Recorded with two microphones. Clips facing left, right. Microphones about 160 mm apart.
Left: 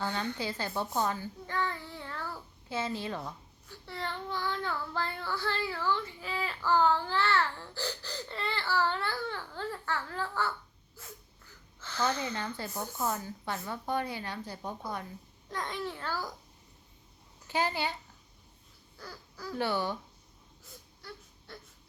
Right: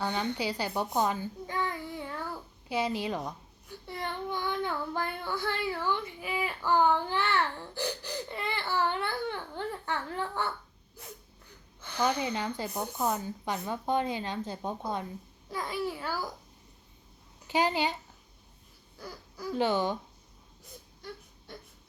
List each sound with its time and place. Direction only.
0.0 s a child's voice: 20° right (ahead or behind)
11.8 s speech: 15° right (ahead or behind)
15.4 s speech: 5° right (ahead or behind)
17.5 s speech: 15° right (ahead or behind)
18.9 s speech: 15° right (ahead or behind)
21.0 s a sound: 20° right (ahead or behind)